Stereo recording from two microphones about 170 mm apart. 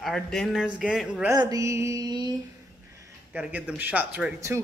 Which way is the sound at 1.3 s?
20° right (ahead or behind).